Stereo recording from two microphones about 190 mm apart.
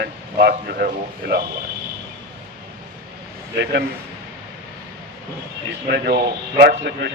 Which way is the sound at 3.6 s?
60° right (ahead or behind).